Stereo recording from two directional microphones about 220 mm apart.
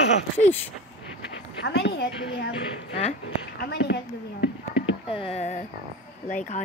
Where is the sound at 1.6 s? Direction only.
55° left (ahead or behind).